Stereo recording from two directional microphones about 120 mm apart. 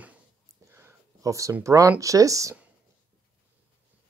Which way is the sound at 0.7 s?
25° right (ahead or behind).